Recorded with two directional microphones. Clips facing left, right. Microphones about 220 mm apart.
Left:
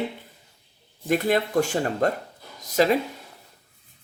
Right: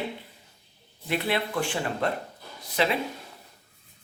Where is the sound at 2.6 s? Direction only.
40° left (ahead or behind).